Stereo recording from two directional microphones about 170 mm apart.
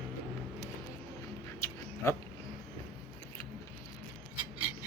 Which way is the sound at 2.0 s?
15° left (ahead or behind).